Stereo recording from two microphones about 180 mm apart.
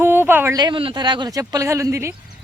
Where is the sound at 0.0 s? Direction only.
10° right (ahead or behind).